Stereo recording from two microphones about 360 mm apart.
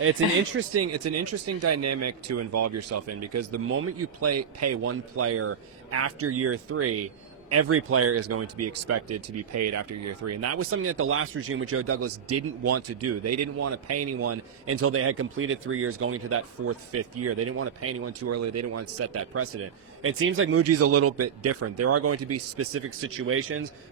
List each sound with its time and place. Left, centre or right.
0.0 s speech: right